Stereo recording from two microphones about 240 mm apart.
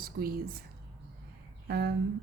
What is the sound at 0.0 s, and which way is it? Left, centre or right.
Speech, right.